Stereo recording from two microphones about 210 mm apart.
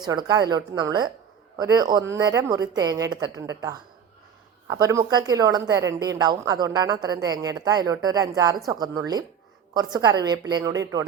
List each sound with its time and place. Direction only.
0.0 s a woman's voice: 20° right (ahead or behind)